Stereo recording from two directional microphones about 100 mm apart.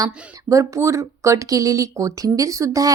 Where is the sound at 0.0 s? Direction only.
35° right (ahead or behind).